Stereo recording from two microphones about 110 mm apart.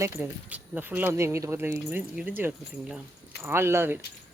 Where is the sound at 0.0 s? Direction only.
25° right (ahead or behind).